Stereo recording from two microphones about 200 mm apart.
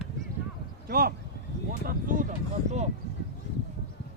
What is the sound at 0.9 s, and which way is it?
Speech, 50° right (ahead or behind).